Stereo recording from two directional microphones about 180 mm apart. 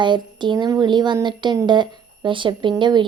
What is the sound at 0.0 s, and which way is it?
A woman's voice, 25° right (ahead or behind).